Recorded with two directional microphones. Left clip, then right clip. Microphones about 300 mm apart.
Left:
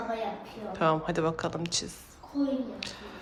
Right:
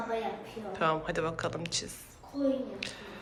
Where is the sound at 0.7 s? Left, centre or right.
Centre.